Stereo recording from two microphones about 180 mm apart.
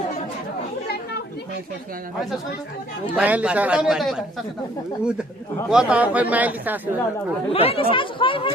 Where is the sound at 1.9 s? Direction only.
50° right (ahead or behind).